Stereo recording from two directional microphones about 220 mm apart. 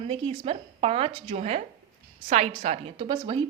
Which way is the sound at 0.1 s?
25° right (ahead or behind).